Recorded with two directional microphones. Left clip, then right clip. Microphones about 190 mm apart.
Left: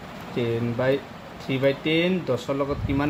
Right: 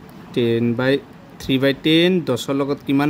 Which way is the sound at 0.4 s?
55° right (ahead or behind).